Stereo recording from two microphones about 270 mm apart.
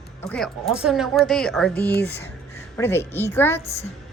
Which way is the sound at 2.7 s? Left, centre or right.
Centre.